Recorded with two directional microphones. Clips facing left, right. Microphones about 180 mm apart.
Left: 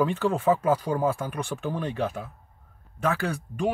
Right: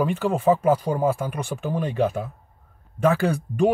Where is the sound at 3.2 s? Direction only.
20° right (ahead or behind).